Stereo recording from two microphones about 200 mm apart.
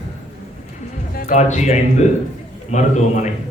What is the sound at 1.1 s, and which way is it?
A man's voice, 35° left (ahead or behind).